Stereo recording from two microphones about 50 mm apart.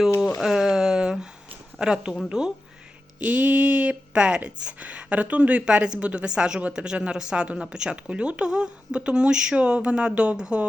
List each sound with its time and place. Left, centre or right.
0.4 s a sound: centre
1.8 s speech: centre
3.2 s speech: right
6.6 s speech: right